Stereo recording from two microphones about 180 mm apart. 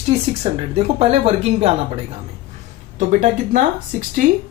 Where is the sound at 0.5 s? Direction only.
35° right (ahead or behind).